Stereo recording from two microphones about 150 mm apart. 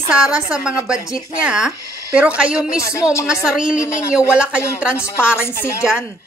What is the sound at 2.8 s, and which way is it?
Music, 20° left (ahead or behind).